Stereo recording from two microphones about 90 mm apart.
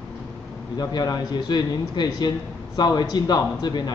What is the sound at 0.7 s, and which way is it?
Speech, 45° left (ahead or behind).